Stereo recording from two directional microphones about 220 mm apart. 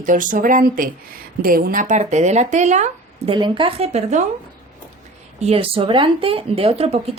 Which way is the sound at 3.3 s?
20° right (ahead or behind).